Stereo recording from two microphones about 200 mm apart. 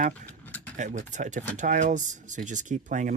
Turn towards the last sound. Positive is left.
turn(degrees=-40)  # may be behind; listen again after turning